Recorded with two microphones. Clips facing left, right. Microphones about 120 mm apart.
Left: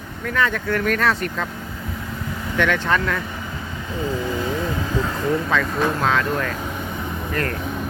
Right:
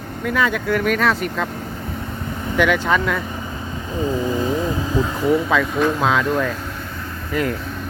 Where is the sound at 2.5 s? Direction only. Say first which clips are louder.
Right 3 dB; 10° right (ahead or behind).